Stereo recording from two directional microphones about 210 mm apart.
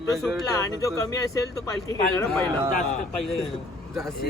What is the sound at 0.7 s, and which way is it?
Speech, 15° left (ahead or behind).